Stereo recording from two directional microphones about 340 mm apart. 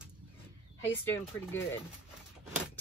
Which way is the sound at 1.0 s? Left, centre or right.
Centre.